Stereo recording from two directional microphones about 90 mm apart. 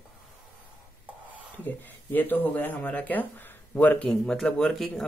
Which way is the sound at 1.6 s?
20° left (ahead or behind).